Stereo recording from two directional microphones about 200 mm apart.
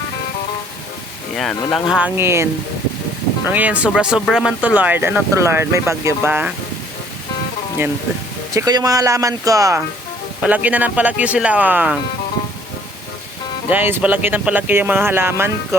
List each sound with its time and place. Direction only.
1.7 s speech: 5° right (ahead or behind)
8.5 s speech: 15° right (ahead or behind)
13.7 s speech: 10° right (ahead or behind)